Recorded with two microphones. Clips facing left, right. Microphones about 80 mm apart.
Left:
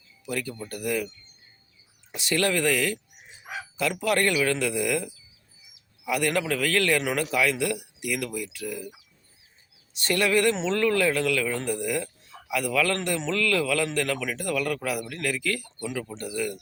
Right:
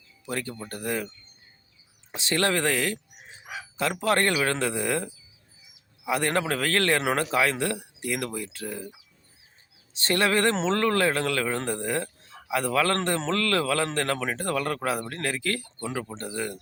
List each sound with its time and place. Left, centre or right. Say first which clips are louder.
0.3 s speech: left 1 dB; right
2.1 s a man's voice: even; right
10.1 s a man's voice: even; right